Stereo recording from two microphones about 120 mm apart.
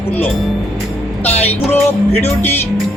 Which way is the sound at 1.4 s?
15° left (ahead or behind).